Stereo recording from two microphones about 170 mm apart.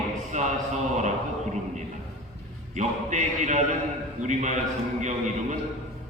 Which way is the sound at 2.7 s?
45° right (ahead or behind).